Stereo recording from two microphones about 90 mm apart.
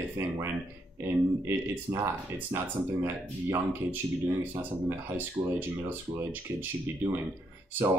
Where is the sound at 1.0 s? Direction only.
30° right (ahead or behind).